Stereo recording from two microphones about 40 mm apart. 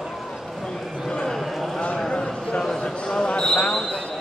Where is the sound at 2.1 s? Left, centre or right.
Left.